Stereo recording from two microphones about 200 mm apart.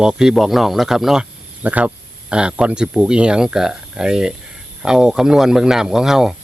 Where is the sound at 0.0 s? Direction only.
5° right (ahead or behind).